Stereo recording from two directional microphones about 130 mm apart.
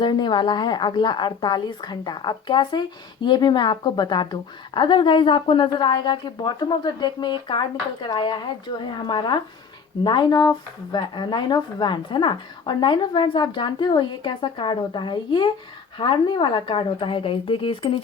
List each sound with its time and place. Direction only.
0.0 s a woman's voice: 35° left (ahead or behind)